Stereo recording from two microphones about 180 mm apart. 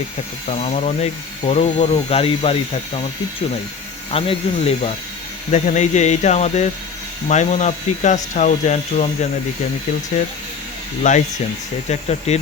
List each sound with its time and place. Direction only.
0.4 s speech: 35° left (ahead or behind)
4.1 s speech: 30° left (ahead or behind)
11.1 s speech: 45° left (ahead or behind)